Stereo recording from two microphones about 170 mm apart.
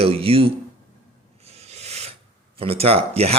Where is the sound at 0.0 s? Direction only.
35° right (ahead or behind).